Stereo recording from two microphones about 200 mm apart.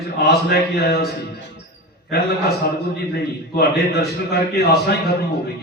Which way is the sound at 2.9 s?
50° left (ahead or behind).